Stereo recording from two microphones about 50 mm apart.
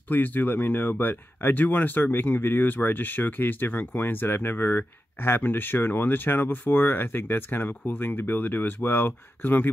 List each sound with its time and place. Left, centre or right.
0.1 s speech: left